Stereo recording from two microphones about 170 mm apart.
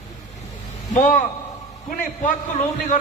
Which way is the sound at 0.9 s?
50° left (ahead or behind).